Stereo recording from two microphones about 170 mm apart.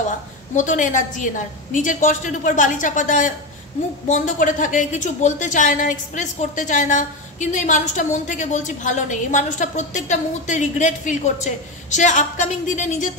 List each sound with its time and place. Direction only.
0.6 s a woman's voice: 50° left (ahead or behind)